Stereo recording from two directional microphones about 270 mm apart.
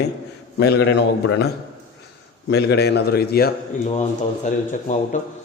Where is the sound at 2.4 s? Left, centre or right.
Left.